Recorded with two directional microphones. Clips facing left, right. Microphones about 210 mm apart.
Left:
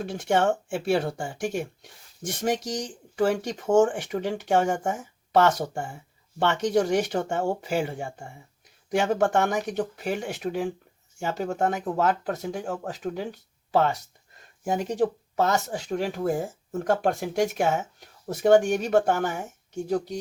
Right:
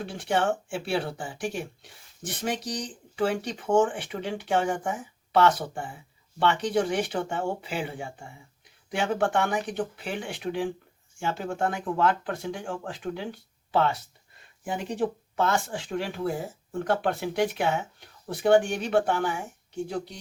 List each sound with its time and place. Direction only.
0.0 s speech: 45° left (ahead or behind)